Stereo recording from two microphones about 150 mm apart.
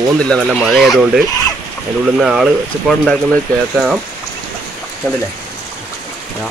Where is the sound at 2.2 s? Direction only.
5° right (ahead or behind).